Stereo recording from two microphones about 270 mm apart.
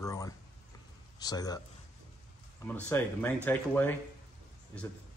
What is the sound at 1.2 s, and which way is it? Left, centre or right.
Speech, centre.